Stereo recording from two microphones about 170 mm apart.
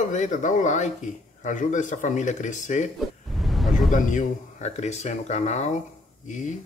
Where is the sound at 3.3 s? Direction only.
Centre (ahead or behind).